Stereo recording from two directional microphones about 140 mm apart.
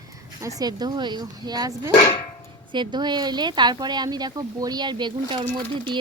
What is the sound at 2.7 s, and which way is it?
Speech, 35° right (ahead or behind).